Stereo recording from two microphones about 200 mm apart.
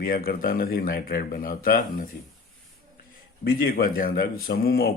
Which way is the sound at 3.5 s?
50° left (ahead or behind).